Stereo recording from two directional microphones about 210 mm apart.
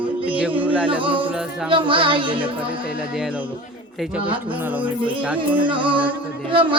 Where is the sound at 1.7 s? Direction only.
25° right (ahead or behind).